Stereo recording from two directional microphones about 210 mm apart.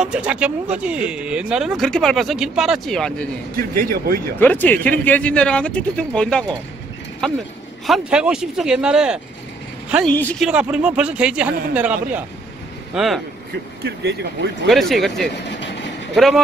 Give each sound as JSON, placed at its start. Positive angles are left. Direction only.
{"t": 0.0, "sound": "speech", "side_deg": -5}
{"t": 3.5, "sound": "a man's voice", "side_deg": -45}
{"t": 4.4, "sound": "a woman's voice", "side_deg": 10}
{"t": 10.1, "sound": "speech", "side_deg": 5}
{"t": 10.5, "sound": "speech", "side_deg": -5}
{"t": 13.8, "sound": "a man's voice", "side_deg": -55}
{"t": 14.7, "sound": "speech", "side_deg": 0}